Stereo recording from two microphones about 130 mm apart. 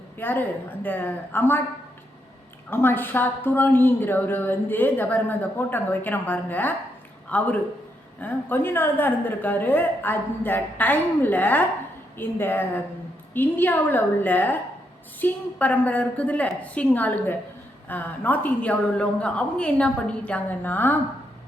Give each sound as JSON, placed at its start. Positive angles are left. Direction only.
{"t": 0.2, "sound": "a woman's voice", "side_deg": 15}
{"t": 2.6, "sound": "a woman's voice", "side_deg": 15}